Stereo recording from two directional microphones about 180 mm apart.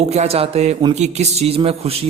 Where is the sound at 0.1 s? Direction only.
35° right (ahead or behind).